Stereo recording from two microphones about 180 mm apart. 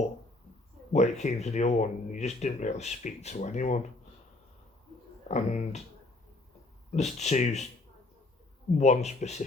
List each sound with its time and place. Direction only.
0.9 s speech: 40° left (ahead or behind)
5.3 s speech: 40° left (ahead or behind)
6.9 s speech: 40° left (ahead or behind)
8.8 s speech: 40° left (ahead or behind)